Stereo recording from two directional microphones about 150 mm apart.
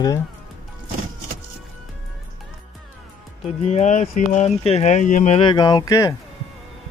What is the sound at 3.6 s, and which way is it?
Speech, 50° left (ahead or behind).